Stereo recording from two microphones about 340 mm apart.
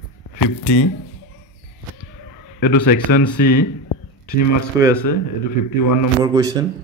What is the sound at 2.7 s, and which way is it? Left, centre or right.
A man's voice, left.